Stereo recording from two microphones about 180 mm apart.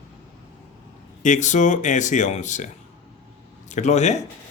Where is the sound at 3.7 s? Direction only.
40° left (ahead or behind).